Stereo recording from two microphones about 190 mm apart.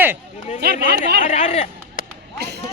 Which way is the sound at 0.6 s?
55° right (ahead or behind).